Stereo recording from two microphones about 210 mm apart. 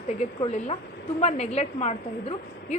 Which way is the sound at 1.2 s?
30° left (ahead or behind).